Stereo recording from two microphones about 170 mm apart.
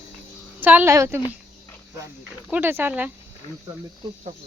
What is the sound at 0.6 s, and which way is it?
Speech, 10° right (ahead or behind).